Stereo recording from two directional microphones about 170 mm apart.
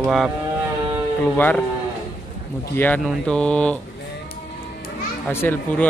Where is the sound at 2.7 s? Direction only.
10° left (ahead or behind).